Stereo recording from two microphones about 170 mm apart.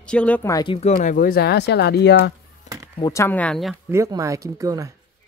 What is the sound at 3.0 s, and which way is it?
Speech, 20° left (ahead or behind).